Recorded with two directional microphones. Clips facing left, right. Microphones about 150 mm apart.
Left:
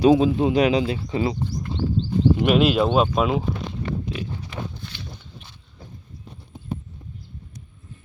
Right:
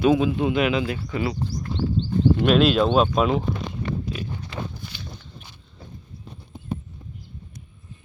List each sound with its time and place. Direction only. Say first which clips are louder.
0.0 s speech: left 3 dB; 35° left (ahead or behind)
0.9 s speech: left 3 dB; 20° left (ahead or behind)
1.7 s a sound: right 1 dB; 25° left (ahead or behind)
2.0 s speech: even; 15° left (ahead or behind)